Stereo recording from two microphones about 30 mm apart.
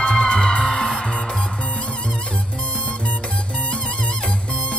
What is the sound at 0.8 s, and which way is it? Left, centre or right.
Music, centre.